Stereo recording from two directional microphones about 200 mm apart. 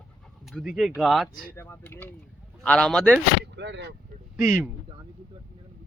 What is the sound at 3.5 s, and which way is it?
Speech, 60° right (ahead or behind).